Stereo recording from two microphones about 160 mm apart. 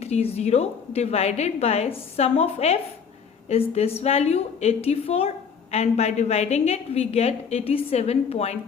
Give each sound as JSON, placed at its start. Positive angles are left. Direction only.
{"t": 0.0, "sound": "a woman's voice", "side_deg": 40}